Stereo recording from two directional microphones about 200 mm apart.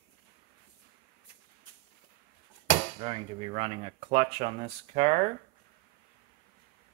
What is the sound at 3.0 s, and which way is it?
Speech, 30° right (ahead or behind).